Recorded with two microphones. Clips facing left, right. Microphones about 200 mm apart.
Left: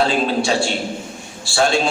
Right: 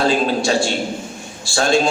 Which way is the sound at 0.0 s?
45° right (ahead or behind).